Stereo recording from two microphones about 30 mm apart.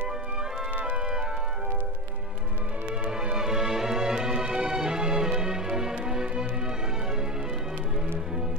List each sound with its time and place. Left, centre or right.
3.1 s music: right